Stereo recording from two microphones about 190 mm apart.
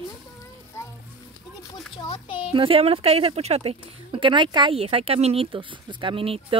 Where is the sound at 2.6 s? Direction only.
30° right (ahead or behind).